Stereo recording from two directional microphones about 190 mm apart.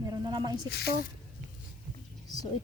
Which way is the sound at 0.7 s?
60° left (ahead or behind).